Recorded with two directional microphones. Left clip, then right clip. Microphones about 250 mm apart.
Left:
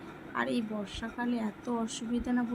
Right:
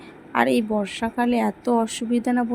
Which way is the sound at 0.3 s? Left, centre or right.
Right.